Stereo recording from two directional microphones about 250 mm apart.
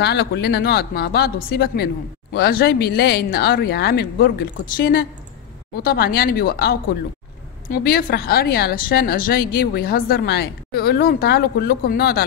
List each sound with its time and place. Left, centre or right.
0.0 s speech: left